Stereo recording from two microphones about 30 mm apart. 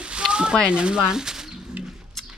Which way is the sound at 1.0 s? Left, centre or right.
Centre.